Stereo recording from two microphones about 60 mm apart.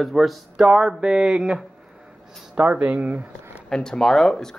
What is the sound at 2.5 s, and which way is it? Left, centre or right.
Speech, right.